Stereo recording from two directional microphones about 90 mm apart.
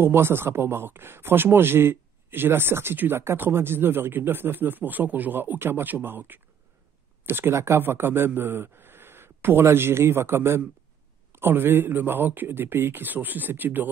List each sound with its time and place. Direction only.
0.0 s a man's voice: 25° right (ahead or behind)